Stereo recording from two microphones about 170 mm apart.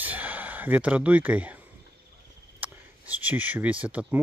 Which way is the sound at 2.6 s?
10° right (ahead or behind).